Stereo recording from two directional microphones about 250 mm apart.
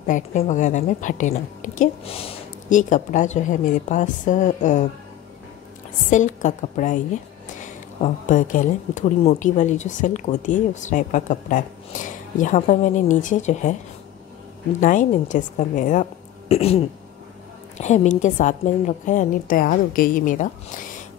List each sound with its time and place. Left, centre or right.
0.0 s a woman's voice: left
6.0 s a woman's voice: left
14.8 s a woman's voice: left